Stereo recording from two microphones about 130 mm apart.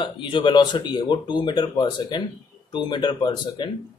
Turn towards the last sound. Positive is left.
turn(degrees=35)  # may be behind; listen again after turning